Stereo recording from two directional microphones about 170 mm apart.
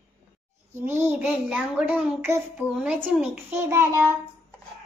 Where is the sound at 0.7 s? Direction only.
15° right (ahead or behind).